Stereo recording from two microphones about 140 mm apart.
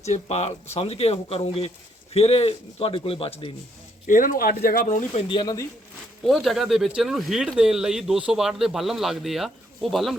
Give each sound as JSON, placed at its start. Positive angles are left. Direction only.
{"t": 0.0, "sound": "a man's voice", "side_deg": 50}
{"t": 4.0, "sound": "speech", "side_deg": 75}
{"t": 5.3, "sound": "a man's voice", "side_deg": 30}
{"t": 6.2, "sound": "speech", "side_deg": 0}